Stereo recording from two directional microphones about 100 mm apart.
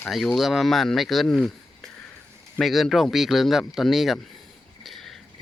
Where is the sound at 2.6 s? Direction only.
Centre (ahead or behind).